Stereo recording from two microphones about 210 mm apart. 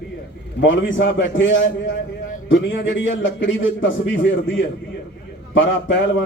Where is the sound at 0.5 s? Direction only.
60° left (ahead or behind).